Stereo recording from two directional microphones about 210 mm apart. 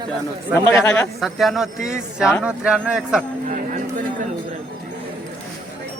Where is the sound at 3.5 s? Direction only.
40° right (ahead or behind).